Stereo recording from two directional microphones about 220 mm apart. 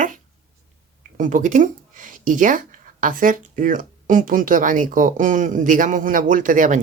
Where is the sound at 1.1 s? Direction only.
35° right (ahead or behind).